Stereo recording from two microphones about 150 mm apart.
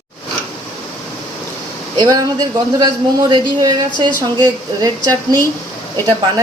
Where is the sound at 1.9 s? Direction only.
25° right (ahead or behind).